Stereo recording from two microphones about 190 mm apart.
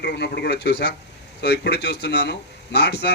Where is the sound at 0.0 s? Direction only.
60° left (ahead or behind).